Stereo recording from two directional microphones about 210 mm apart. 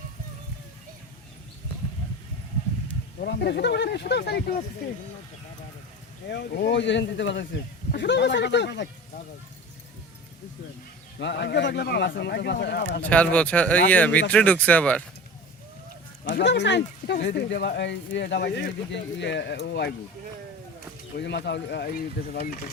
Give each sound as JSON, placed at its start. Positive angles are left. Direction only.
{"t": 3.2, "sound": "speech", "side_deg": 50}
{"t": 6.3, "sound": "speech", "side_deg": 55}
{"t": 11.2, "sound": "speech", "side_deg": 55}
{"t": 13.0, "sound": "speech", "side_deg": 5}
{"t": 16.2, "sound": "speech", "side_deg": 55}
{"t": 21.2, "sound": "speech", "side_deg": 55}